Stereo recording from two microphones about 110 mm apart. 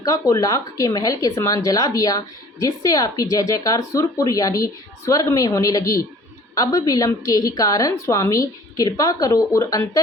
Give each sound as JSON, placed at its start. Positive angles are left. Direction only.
{"t": 0.0, "sound": "speech", "side_deg": 30}